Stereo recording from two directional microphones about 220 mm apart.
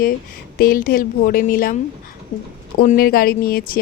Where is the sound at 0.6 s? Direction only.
40° left (ahead or behind).